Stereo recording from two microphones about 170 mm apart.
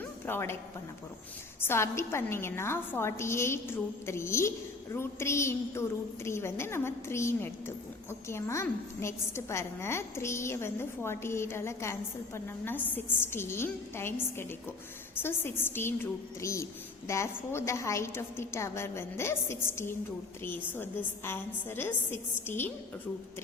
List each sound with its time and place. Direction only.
0.3 s a woman's voice: 15° left (ahead or behind)
1.6 s a woman's voice: 15° left (ahead or behind)